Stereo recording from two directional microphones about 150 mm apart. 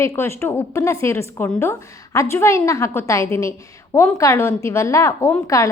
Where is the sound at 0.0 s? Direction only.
20° left (ahead or behind).